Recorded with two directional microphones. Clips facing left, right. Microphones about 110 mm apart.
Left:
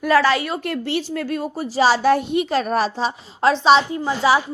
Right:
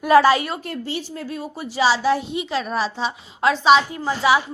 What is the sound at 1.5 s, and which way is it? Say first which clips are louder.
A woman's voice: left 2 dB; 40° left (ahead or behind).